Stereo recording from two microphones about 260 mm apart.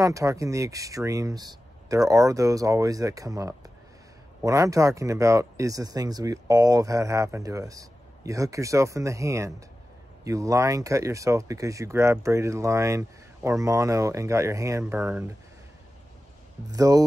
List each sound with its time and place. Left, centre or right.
0.0 s speech: centre
16.7 s speech: centre